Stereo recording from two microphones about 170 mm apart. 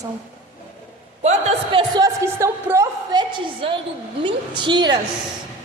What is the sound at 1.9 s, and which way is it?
A woman's voice, 20° right (ahead or behind).